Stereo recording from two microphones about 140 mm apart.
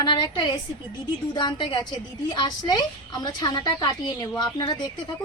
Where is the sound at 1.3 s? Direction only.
35° left (ahead or behind).